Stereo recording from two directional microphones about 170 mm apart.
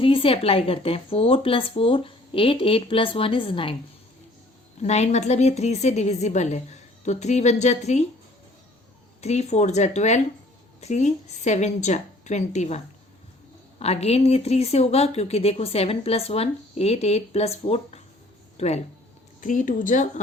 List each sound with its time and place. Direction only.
0.0 s speech: 30° left (ahead or behind)
4.8 s speech: 40° left (ahead or behind)
9.2 s a woman's voice: 40° left (ahead or behind)
19.4 s a woman's voice: 50° left (ahead or behind)